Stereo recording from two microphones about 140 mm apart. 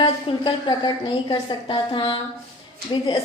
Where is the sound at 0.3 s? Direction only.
35° left (ahead or behind).